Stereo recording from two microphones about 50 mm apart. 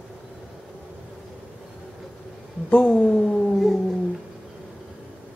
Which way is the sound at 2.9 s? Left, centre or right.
Centre.